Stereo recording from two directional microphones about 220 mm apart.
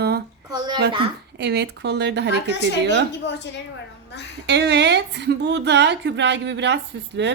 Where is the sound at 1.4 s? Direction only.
50° right (ahead or behind).